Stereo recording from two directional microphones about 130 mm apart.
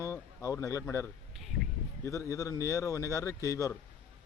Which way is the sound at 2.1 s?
25° left (ahead or behind).